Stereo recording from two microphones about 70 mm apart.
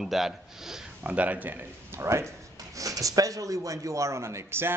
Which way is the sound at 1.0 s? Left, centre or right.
Right.